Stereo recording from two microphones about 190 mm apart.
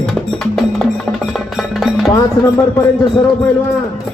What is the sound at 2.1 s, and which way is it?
Speech, 15° left (ahead or behind).